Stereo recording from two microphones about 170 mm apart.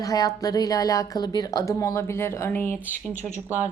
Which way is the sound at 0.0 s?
20° left (ahead or behind).